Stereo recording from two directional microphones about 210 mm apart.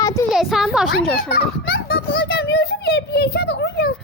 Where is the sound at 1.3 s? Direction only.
50° left (ahead or behind).